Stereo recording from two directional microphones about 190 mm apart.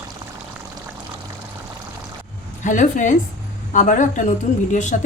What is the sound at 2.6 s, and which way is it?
A woman's voice, 40° left (ahead or behind).